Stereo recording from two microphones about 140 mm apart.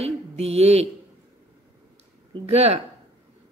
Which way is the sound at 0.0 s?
50° right (ahead or behind).